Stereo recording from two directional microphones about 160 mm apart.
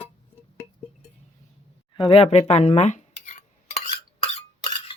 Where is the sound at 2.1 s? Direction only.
40° left (ahead or behind).